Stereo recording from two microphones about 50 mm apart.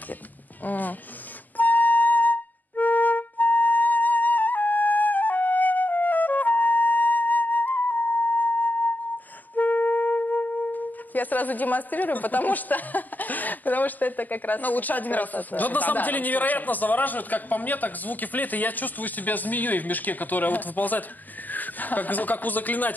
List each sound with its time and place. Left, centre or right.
0.7 s speech: left
1.6 s music: left
9.6 s speech: left